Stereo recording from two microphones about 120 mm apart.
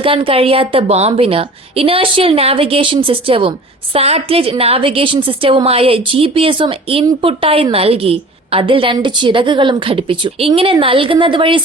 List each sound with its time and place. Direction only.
0.0 s a woman's voice: 50° right (ahead or behind)